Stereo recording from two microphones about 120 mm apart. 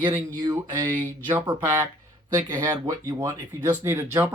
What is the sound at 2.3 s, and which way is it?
Speech, 30° right (ahead or behind).